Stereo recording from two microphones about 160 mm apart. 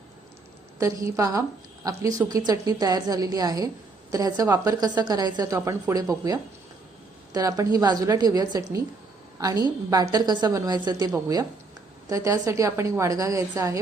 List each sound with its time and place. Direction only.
0.8 s a woman's voice: 20° right (ahead or behind)